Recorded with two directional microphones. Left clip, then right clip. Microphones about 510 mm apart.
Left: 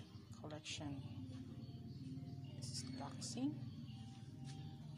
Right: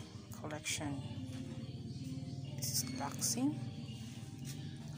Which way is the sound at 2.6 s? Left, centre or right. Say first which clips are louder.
Right 11 dB; left.